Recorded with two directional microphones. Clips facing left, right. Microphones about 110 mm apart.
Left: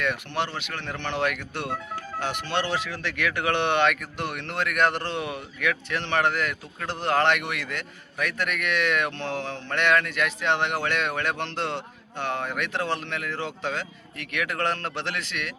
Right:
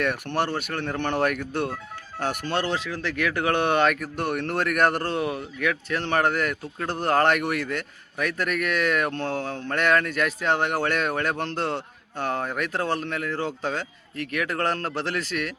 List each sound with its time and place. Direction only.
0.0 s speech: 50° right (ahead or behind)